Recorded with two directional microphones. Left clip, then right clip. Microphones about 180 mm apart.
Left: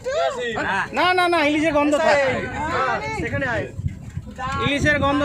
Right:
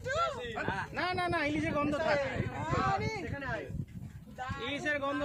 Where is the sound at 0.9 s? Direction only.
20° left (ahead or behind).